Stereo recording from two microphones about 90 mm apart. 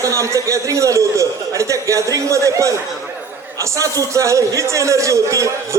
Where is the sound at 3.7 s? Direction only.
35° right (ahead or behind).